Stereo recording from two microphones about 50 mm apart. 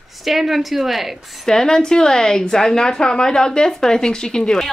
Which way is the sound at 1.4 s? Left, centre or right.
Centre.